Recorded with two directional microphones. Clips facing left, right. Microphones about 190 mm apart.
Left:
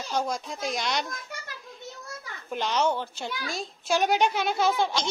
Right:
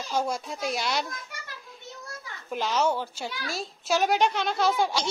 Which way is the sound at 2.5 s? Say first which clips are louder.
Even; 5° right (ahead or behind).